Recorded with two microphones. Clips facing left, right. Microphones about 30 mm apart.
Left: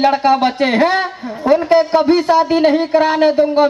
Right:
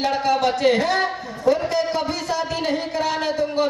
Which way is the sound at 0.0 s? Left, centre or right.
Left.